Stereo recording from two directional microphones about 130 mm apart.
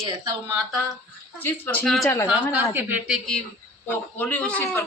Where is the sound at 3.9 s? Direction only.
10° left (ahead or behind).